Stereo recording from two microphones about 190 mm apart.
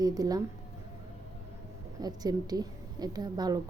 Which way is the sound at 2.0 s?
20° right (ahead or behind).